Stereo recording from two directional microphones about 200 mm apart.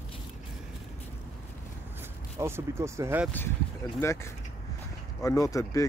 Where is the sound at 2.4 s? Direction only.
15° right (ahead or behind).